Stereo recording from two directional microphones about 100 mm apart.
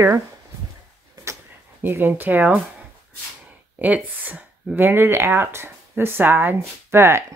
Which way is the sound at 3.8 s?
15° right (ahead or behind).